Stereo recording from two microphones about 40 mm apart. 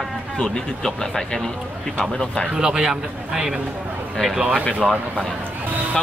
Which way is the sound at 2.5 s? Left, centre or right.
Centre.